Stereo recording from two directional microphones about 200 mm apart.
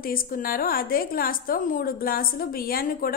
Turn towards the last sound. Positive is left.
turn(degrees=45)  # may be behind; listen again after turning